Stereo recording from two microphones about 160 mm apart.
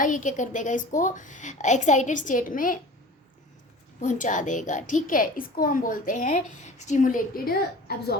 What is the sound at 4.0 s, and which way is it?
A woman's voice, 50° left (ahead or behind).